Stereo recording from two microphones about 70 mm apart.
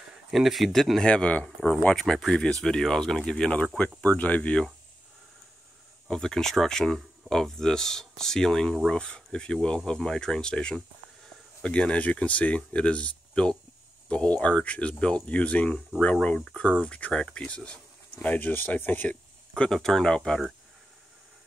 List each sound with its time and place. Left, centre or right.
0.3 s speech: centre
1.0 s speech: centre
2.0 s speech: centre
4.0 s speech: left
6.0 s speech: centre; by 19.1 s left
19.5 s speech: centre